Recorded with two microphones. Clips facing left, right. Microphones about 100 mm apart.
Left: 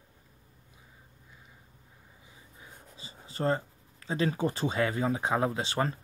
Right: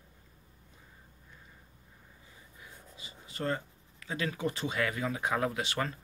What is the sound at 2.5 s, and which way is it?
Speech, 30° left (ahead or behind).